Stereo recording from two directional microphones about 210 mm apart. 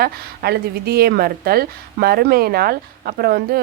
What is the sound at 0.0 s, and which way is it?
A woman's voice, 50° right (ahead or behind).